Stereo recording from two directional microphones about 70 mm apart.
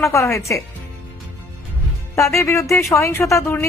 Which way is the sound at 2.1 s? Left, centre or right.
Left.